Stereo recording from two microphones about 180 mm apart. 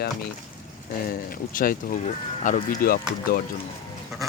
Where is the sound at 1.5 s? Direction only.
55° left (ahead or behind).